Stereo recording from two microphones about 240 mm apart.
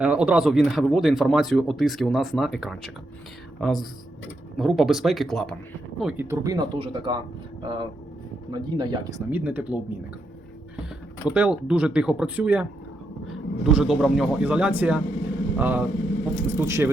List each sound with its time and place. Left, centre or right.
0.0 s speech: centre
11.3 s speech: centre